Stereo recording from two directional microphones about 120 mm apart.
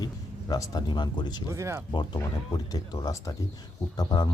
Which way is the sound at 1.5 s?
25° right (ahead or behind).